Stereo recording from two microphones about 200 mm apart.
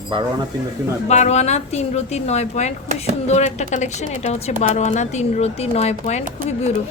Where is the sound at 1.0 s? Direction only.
35° left (ahead or behind).